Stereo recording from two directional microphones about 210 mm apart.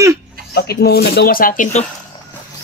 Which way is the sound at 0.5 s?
50° left (ahead or behind).